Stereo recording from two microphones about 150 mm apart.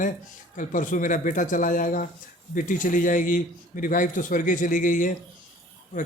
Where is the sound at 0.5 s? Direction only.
60° left (ahead or behind).